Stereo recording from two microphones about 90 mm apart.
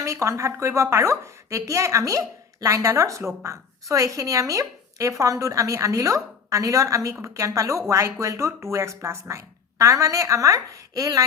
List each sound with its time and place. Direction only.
0.0 s a woman's voice: 35° right (ahead or behind)